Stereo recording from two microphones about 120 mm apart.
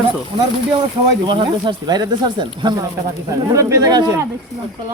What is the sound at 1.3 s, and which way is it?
Speech, 40° right (ahead or behind).